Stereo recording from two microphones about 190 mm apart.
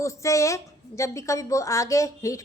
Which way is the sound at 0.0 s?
15° left (ahead or behind).